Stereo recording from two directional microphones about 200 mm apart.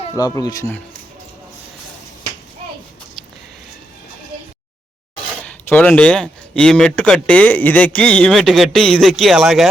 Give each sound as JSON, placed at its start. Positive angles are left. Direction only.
{"t": 0.2, "sound": "speech", "side_deg": 20}
{"t": 5.6, "sound": "speech", "side_deg": 5}